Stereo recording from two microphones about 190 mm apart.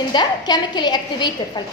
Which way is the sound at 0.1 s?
20° left (ahead or behind).